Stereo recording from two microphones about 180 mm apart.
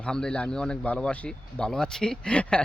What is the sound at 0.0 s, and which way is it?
Speech, 5° left (ahead or behind).